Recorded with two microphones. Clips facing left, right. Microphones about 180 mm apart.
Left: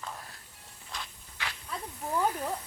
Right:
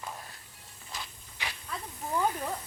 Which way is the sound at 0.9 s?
5° right (ahead or behind).